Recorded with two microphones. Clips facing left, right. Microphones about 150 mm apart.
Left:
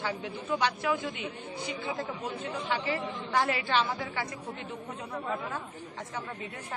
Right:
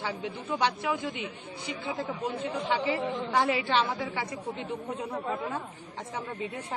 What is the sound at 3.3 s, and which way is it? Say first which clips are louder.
Speech: right 1 dB; 10° right (ahead or behind).